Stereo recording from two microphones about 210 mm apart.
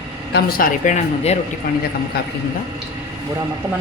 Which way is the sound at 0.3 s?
45° left (ahead or behind).